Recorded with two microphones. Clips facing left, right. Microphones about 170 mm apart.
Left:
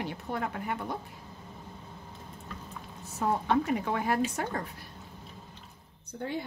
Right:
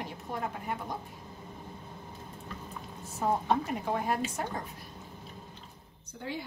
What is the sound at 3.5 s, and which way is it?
A woman's voice, 70° left (ahead or behind).